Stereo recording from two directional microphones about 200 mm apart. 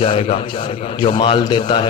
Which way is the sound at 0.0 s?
25° left (ahead or behind).